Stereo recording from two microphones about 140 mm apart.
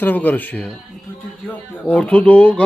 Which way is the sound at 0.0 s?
10° left (ahead or behind).